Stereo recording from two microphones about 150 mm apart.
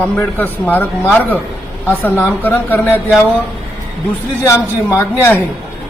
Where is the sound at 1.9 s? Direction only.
15° left (ahead or behind).